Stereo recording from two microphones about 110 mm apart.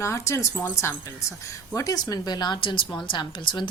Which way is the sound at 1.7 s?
30° left (ahead or behind).